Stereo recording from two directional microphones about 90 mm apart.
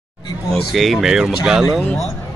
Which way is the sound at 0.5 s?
Centre (ahead or behind).